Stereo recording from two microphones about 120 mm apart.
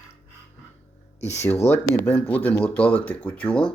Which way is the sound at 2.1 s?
10° left (ahead or behind).